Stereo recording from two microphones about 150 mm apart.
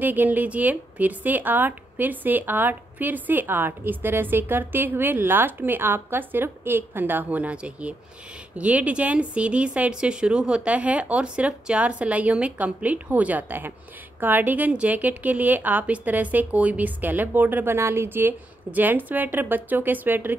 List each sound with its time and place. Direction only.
0.0 s a woman's voice: 10° right (ahead or behind)